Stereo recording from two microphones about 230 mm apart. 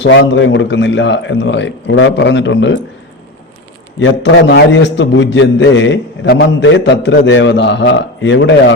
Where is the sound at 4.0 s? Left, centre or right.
Left.